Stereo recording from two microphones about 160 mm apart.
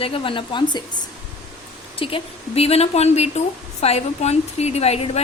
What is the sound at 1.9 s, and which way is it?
A woman's voice, 35° left (ahead or behind).